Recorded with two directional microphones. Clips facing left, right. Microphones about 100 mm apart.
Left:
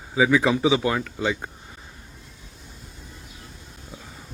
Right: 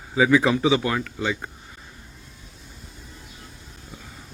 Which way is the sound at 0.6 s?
20° left (ahead or behind).